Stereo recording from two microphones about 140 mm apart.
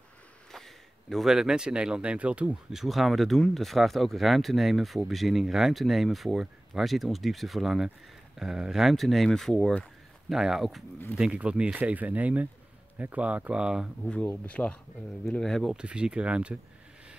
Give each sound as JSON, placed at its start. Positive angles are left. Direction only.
{"t": 0.5, "sound": "speech", "side_deg": 0}
{"t": 14.0, "sound": "speech", "side_deg": 10}